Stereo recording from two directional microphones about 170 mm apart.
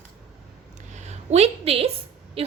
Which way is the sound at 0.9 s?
40° right (ahead or behind).